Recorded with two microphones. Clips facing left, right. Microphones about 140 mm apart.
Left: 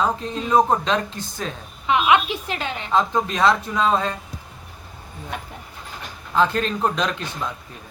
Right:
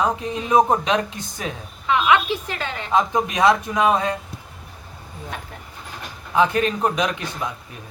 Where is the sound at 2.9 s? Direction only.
15° right (ahead or behind).